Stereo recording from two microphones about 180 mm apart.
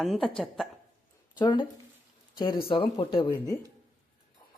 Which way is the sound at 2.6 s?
30° left (ahead or behind).